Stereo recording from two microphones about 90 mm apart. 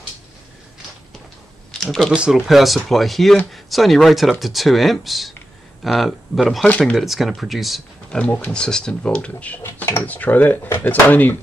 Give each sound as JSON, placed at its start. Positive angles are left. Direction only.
{"t": 1.7, "sound": "speech", "side_deg": 5}
{"t": 7.0, "sound": "speech", "side_deg": 0}
{"t": 8.2, "sound": "speech", "side_deg": 20}
{"t": 8.5, "sound": "speech", "side_deg": 10}
{"t": 9.6, "sound": "speech", "side_deg": 30}